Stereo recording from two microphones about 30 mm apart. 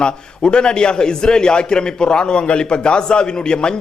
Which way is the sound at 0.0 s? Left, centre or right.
Left.